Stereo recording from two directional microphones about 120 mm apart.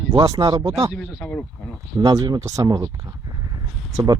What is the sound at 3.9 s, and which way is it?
Speech, 25° right (ahead or behind).